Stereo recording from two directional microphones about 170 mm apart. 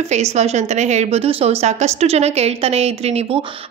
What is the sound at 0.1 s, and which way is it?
A woman's voice, 40° right (ahead or behind).